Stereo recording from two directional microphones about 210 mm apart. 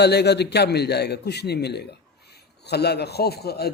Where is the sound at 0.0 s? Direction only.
50° left (ahead or behind).